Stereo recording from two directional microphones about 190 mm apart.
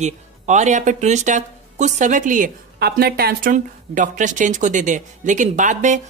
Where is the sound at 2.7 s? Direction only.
55° right (ahead or behind).